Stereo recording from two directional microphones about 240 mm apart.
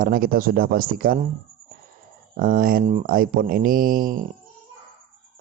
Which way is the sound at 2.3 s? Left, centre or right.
Right.